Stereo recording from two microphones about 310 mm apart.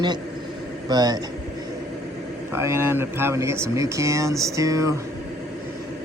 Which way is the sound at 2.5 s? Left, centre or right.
Centre.